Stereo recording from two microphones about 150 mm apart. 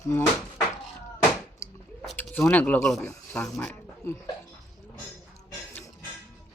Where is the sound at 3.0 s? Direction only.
15° left (ahead or behind).